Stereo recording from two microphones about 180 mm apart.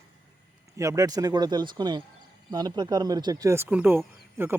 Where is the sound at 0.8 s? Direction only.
20° right (ahead or behind).